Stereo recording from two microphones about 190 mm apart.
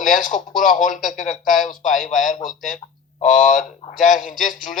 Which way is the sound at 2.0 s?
Centre (ahead or behind).